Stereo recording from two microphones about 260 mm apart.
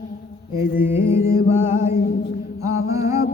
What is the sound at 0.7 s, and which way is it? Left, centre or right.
Mantra, centre.